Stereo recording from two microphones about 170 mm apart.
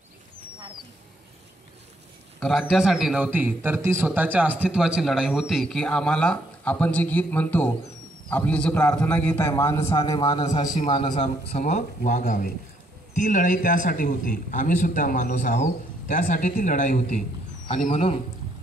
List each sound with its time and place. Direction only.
2.7 s a man's voice: 5° right (ahead or behind); by 18.0 s 45° left (ahead or behind)